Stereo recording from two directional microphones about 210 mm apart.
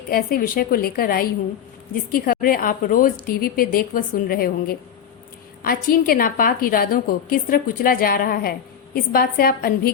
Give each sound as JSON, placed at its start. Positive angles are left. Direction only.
{"t": 0.1, "sound": "a woman's voice", "side_deg": 45}